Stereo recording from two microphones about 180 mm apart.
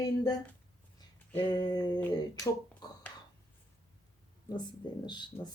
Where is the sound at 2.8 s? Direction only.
20° left (ahead or behind).